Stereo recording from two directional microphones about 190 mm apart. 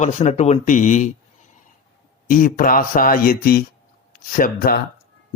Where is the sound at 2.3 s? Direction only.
45° left (ahead or behind).